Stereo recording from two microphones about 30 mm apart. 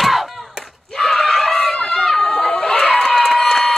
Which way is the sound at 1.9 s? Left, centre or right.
Centre.